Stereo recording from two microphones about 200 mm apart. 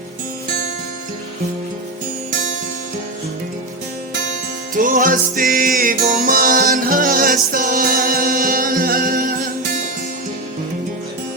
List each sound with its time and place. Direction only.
4.7 s music: 40° right (ahead or behind)